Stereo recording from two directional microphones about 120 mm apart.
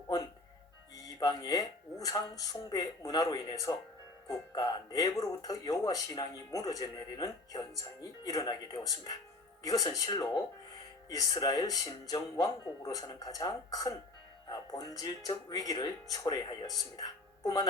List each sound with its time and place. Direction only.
1.0 s speech: 30° left (ahead or behind)